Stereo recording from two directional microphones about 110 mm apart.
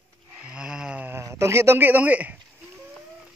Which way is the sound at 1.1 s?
25° right (ahead or behind).